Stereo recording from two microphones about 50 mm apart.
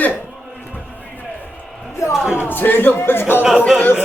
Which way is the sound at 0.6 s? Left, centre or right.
Left.